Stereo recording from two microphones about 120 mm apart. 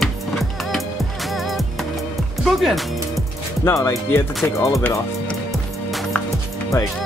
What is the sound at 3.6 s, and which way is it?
Speech, 25° left (ahead or behind).